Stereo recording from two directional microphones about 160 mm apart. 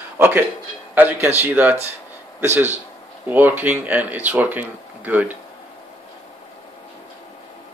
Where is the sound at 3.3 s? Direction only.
10° right (ahead or behind).